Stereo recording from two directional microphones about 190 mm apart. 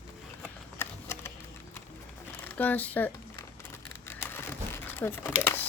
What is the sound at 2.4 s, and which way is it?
Speech, 10° left (ahead or behind).